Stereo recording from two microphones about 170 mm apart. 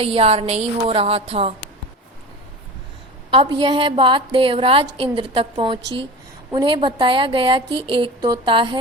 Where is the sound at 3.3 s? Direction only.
30° right (ahead or behind).